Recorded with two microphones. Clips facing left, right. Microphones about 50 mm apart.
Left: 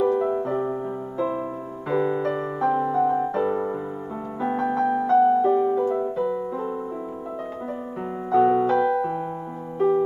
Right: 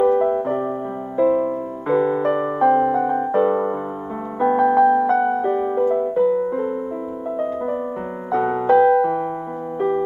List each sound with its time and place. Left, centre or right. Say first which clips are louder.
0.0 s music: right 5 dB; right
1.9 s piano: right 5 dB; right
4.6 s piano: right 8 dB; centre
5.1 s music: left 1 dB; right
8.3 s music: right 1 dB; right